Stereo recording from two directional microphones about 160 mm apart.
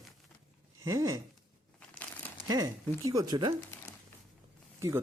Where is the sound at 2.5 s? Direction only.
20° right (ahead or behind).